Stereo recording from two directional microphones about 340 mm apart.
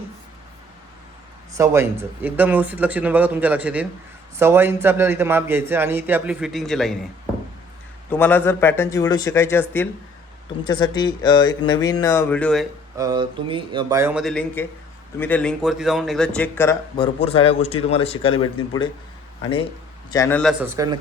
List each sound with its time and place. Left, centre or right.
1.5 s a man's voice: centre
8.1 s speech: centre
13.0 s a man's voice: centre